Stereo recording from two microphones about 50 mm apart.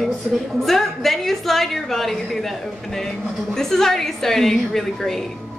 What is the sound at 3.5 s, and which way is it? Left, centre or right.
A woman's voice, centre.